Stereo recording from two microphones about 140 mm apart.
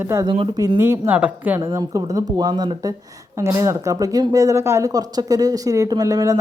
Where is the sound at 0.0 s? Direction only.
20° right (ahead or behind).